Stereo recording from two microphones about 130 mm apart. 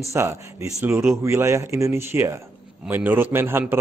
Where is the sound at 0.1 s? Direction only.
20° right (ahead or behind).